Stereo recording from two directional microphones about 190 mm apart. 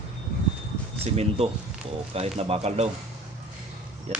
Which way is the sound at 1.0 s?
30° right (ahead or behind).